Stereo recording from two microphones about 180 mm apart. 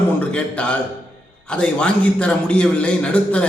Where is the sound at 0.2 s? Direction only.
5° left (ahead or behind).